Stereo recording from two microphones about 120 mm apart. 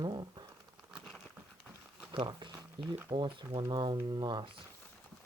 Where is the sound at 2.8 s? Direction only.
40° right (ahead or behind).